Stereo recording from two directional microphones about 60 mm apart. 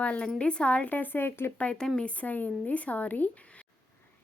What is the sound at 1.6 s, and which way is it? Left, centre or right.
Speech, left.